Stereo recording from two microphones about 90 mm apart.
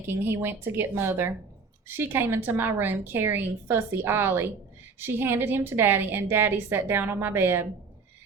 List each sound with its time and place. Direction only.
0.1 s a woman's voice: 25° right (ahead or behind)